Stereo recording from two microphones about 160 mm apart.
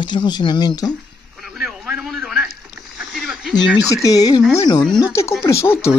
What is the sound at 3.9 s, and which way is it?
Speech, 20° left (ahead or behind).